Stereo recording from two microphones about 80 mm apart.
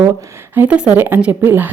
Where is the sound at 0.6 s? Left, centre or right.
Centre.